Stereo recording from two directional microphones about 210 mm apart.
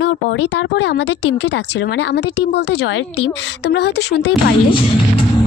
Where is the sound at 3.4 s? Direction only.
55° left (ahead or behind).